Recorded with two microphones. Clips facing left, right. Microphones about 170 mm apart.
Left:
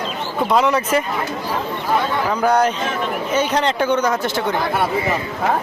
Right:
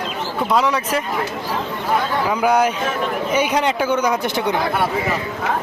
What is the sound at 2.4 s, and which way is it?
Speech, 10° right (ahead or behind).